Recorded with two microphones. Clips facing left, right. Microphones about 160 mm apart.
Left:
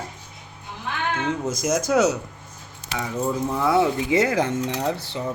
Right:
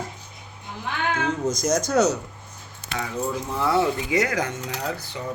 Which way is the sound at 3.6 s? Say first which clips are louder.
Left 1 dB; 20° left (ahead or behind).